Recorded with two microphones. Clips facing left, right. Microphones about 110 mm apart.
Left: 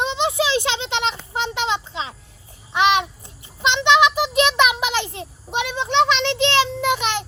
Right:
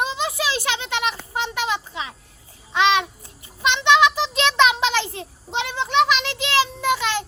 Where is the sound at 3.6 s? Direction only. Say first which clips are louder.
Left 1 dB; 20° left (ahead or behind).